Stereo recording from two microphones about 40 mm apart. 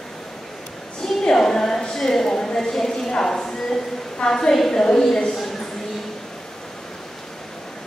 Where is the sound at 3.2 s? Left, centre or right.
Centre.